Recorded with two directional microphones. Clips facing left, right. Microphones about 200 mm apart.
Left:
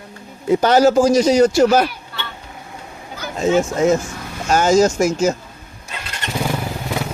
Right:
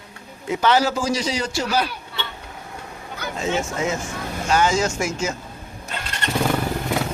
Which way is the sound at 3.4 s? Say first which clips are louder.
Left 8 dB; 40° left (ahead or behind).